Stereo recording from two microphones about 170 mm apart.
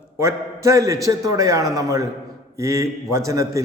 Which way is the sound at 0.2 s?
15° right (ahead or behind).